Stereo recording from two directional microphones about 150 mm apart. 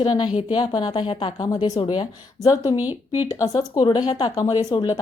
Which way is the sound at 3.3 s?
25° left (ahead or behind).